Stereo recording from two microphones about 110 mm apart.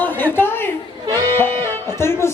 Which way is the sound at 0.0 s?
15° left (ahead or behind).